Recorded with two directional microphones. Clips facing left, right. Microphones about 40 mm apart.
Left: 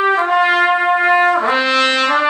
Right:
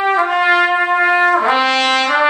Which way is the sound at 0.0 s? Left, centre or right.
Centre.